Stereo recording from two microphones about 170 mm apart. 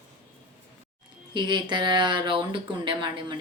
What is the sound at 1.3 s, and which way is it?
Speech, 25° right (ahead or behind).